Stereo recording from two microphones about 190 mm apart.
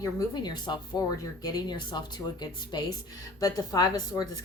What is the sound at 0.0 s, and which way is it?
A woman's voice, 20° left (ahead or behind).